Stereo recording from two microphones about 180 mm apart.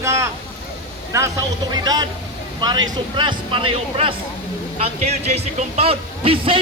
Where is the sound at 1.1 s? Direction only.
20° right (ahead or behind).